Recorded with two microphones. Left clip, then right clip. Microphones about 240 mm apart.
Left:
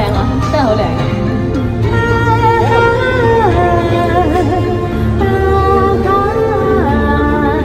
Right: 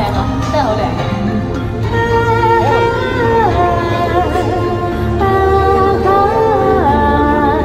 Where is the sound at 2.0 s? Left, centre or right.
Right.